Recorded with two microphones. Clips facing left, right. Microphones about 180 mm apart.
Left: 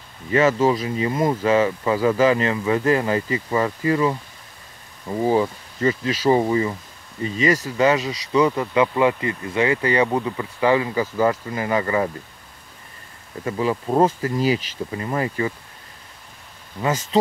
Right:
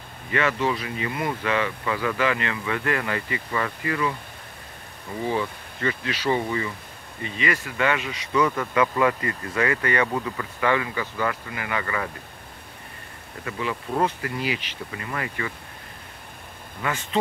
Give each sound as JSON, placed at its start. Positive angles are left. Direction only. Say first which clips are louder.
{"t": 0.3, "sound": "speech", "louder": "left 7 dB", "side_deg": 30}
{"t": 0.6, "sound": "speech", "louder": "left 6 dB", "side_deg": 40}
{"t": 0.8, "sound": "speech", "louder": "left 7 dB", "side_deg": 30}
{"t": 5.2, "sound": "speech", "louder": "left 7 dB", "side_deg": 35}
{"t": 13.5, "sound": "speech", "louder": "left 7 dB", "side_deg": 35}
{"t": 17.1, "sound": "speech", "louder": "left 6 dB", "side_deg": 35}